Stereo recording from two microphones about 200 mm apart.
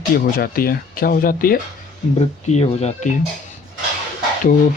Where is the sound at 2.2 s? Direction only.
35° left (ahead or behind).